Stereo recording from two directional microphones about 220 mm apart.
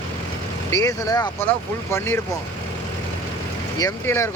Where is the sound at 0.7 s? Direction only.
15° left (ahead or behind).